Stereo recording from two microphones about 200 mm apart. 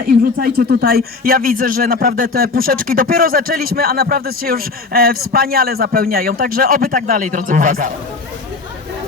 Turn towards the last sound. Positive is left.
turn(degrees=-40)  # may be behind; listen again after turning